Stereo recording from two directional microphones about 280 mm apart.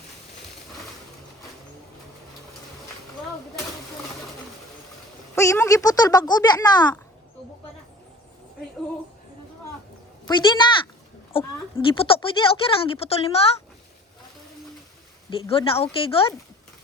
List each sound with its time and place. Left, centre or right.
5.3 s speech: centre
10.2 s speech: centre
15.3 s speech: centre